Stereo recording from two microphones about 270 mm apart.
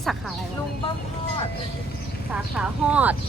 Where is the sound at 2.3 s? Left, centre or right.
Centre.